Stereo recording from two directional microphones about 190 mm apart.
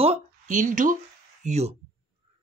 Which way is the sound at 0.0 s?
35° right (ahead or behind).